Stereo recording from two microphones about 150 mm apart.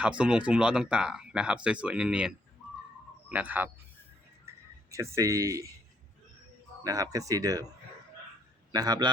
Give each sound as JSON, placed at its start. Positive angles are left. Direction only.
{"t": 0.0, "sound": "speech", "side_deg": -5}
{"t": 4.5, "sound": "music", "side_deg": -15}
{"t": 4.9, "sound": "speech", "side_deg": -20}
{"t": 6.8, "sound": "speech", "side_deg": -25}
{"t": 8.7, "sound": "speech", "side_deg": -25}